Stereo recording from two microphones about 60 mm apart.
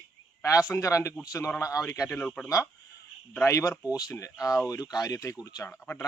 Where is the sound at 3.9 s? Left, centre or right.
Left.